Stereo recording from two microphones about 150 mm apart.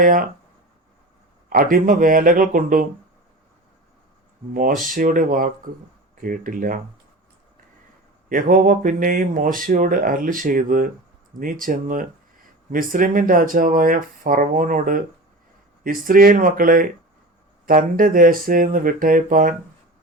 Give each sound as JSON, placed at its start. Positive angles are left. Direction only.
{"t": 0.0, "sound": "speech", "side_deg": -70}
{"t": 1.7, "sound": "speech", "side_deg": -70}
{"t": 4.5, "sound": "speech", "side_deg": -65}
{"t": 8.3, "sound": "speech", "side_deg": -60}